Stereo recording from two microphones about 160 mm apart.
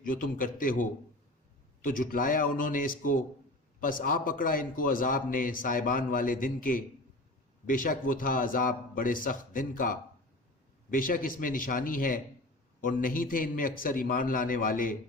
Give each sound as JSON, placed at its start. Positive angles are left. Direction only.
{"t": 0.0, "sound": "a man's voice", "side_deg": 55}